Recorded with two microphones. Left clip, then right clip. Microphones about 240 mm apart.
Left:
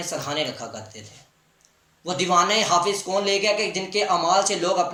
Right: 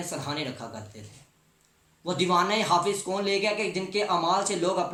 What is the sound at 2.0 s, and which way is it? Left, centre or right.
Speech, centre.